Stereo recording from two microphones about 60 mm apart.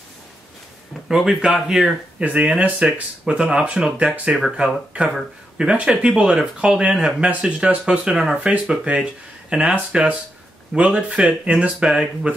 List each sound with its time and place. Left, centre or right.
1.0 s speech: centre
2.1 s speech: right